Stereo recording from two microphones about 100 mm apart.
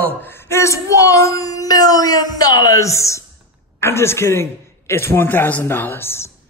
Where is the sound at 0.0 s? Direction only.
20° left (ahead or behind).